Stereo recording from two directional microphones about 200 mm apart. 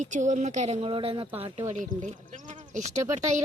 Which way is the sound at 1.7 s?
35° right (ahead or behind).